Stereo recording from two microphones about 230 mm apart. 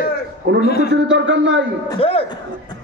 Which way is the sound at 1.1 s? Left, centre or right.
Right.